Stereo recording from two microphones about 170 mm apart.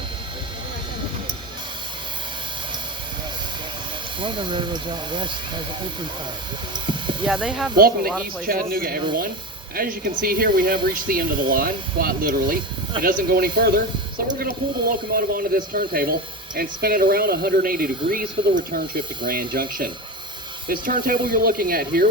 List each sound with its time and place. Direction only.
4.2 s speech: 30° right (ahead or behind)
6.8 s a sound: 30° right (ahead or behind)
7.3 s speech: 5° right (ahead or behind)
8.4 s speech: 60° right (ahead or behind)